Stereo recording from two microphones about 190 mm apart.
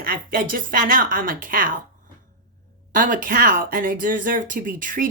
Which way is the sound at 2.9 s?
45° right (ahead or behind).